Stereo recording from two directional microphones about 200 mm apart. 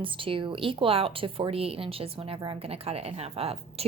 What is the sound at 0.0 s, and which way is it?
A woman's voice, 25° right (ahead or behind).